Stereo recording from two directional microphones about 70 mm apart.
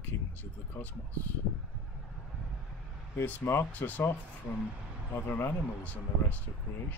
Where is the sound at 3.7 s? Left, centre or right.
Left.